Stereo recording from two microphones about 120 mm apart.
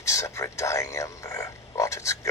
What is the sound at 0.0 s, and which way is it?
Speech, 25° left (ahead or behind).